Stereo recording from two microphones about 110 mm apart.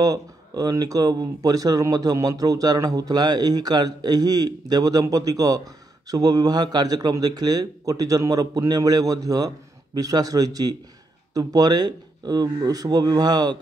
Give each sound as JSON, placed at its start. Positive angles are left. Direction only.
{"t": 0.0, "sound": "speech", "side_deg": -35}